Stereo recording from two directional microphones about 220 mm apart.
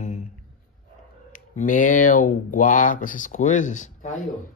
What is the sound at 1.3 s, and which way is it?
Speech, 35° left (ahead or behind).